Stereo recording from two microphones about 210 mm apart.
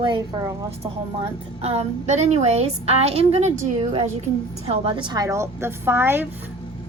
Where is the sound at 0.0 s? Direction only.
20° right (ahead or behind).